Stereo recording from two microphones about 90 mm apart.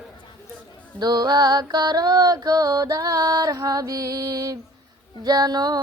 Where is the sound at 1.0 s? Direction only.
50° right (ahead or behind).